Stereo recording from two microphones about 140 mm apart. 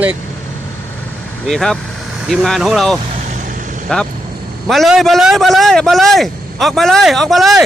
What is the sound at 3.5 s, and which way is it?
Vehicle, 70° right (ahead or behind).